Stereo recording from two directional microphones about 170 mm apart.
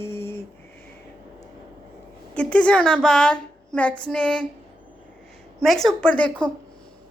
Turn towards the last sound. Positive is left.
turn(degrees=5)  # may be behind; listen again after turning